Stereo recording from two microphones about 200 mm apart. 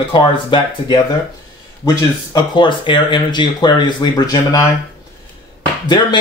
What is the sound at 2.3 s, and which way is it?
Speech, 25° left (ahead or behind).